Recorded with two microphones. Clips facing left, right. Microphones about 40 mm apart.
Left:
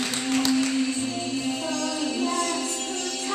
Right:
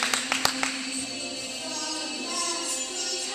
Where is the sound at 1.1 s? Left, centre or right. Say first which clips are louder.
Left 8 dB; left.